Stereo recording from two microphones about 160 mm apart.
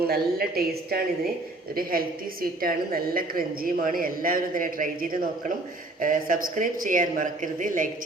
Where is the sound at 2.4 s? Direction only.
65° right (ahead or behind).